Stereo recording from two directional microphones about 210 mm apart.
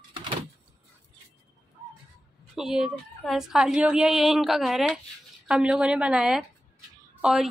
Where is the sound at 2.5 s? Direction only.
Centre (ahead or behind).